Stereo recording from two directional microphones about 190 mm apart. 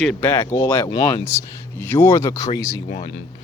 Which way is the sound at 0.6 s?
25° left (ahead or behind).